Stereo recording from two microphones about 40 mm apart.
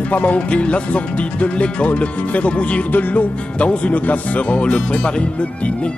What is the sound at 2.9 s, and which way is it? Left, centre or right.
Music, left.